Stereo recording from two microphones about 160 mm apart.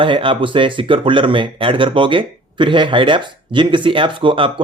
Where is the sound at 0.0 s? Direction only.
35° right (ahead or behind).